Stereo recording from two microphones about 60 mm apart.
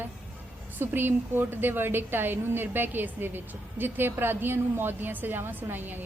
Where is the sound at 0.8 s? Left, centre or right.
Right.